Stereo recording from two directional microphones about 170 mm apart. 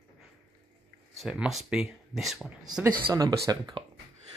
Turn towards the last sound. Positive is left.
turn(degrees=-25)  # may be behind; listen again after turning